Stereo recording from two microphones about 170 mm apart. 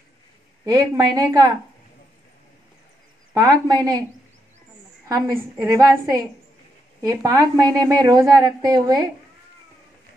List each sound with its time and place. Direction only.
0.7 s a woman's voice: 20° right (ahead or behind)
3.3 s a woman's voice: 20° right (ahead or behind)
5.0 s a woman's voice: 20° right (ahead or behind)